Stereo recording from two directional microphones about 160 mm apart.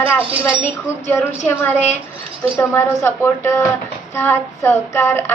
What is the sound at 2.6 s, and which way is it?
Speech, 15° left (ahead or behind).